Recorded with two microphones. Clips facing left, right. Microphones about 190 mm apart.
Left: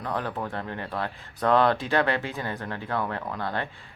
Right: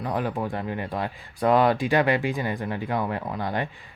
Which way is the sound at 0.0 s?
15° right (ahead or behind).